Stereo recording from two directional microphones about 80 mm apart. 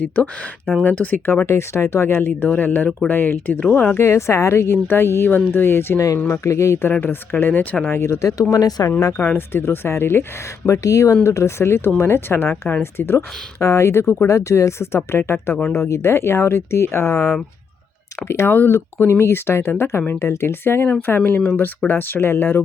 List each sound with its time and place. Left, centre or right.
0.0 s speech: centre
4.0 s speech: left
6.4 s speech: left
7.0 s speech: left
8.3 s speech: left
9.1 s speech: left
10.7 s speech: left
14.3 s speech: left
18.3 s speech: left